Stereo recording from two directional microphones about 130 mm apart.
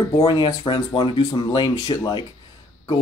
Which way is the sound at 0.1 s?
40° left (ahead or behind).